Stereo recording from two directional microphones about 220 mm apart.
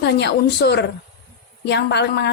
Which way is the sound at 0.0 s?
50° left (ahead or behind).